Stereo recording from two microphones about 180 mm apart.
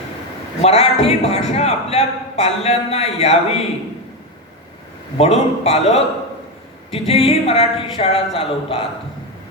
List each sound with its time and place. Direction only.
0.6 s a man's voice: 35° left (ahead or behind)
5.1 s a man's voice: 35° left (ahead or behind)